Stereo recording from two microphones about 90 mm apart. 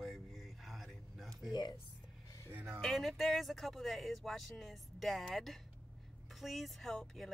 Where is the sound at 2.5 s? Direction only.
25° right (ahead or behind).